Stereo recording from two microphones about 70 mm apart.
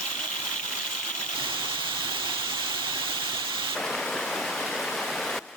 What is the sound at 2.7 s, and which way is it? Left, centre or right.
Waterfall, right.